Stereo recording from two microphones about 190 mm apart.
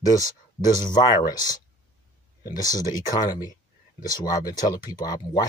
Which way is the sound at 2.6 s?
20° left (ahead or behind).